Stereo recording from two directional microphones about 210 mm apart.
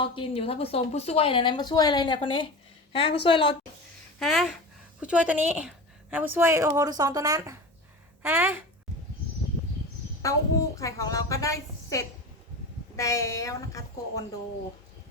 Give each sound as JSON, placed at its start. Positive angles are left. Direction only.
{"t": 0.0, "sound": "a woman's voice", "side_deg": 25}
{"t": 4.2, "sound": "a woman's voice", "side_deg": 0}
{"t": 10.2, "sound": "a woman's voice", "side_deg": 15}